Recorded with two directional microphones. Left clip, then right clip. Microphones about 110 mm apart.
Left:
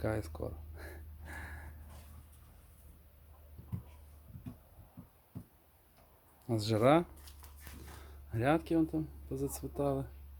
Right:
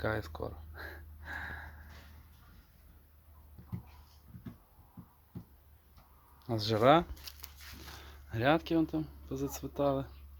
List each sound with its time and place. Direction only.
0.0 s a sound: 20° left (ahead or behind)
6.5 s speech: 20° left (ahead or behind)
8.3 s speech: centre (ahead or behind)